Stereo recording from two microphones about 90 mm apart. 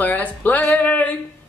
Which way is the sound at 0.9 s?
15° left (ahead or behind).